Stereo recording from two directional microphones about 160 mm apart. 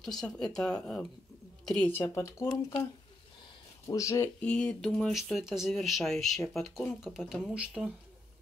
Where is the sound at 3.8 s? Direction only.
20° left (ahead or behind).